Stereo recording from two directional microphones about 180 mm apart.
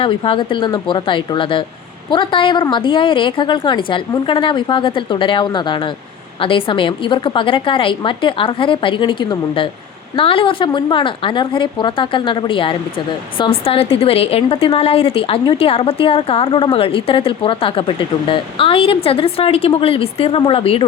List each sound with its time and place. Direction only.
0.0 s a woman's voice: 30° left (ahead or behind)